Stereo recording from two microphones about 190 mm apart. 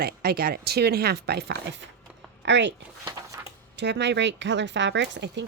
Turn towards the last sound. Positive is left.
turn(degrees=-65)  # may be behind; listen again after turning